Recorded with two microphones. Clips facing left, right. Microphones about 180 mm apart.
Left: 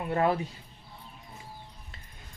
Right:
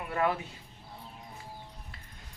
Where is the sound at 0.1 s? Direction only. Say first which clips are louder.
Left 3 dB; 30° left (ahead or behind).